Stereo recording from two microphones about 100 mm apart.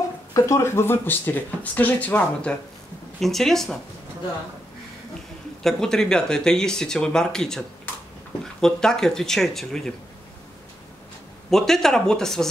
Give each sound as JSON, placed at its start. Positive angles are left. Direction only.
{"t": 0.3, "sound": "speech", "side_deg": 30}
{"t": 5.6, "sound": "speech", "side_deg": 5}
{"t": 11.5, "sound": "speech", "side_deg": 5}